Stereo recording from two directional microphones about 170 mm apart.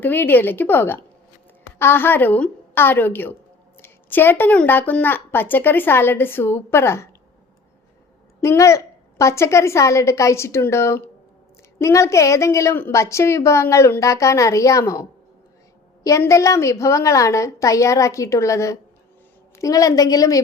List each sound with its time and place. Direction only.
0.0 s a woman's voice: 10° left (ahead or behind)
8.4 s a woman's voice: 15° left (ahead or behind)
16.0 s a woman's voice: 20° left (ahead or behind)